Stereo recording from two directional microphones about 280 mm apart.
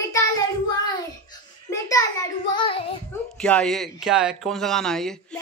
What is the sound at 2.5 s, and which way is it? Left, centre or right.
Child singing, centre.